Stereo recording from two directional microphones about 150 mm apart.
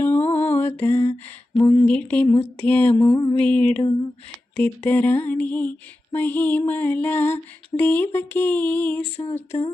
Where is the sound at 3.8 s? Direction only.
30° left (ahead or behind).